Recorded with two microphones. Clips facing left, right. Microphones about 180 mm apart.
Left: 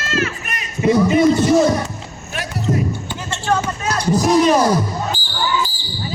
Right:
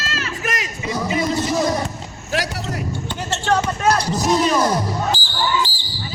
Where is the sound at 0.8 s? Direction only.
55° left (ahead or behind).